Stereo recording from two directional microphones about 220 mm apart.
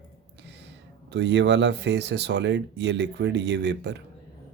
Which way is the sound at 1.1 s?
50° right (ahead or behind).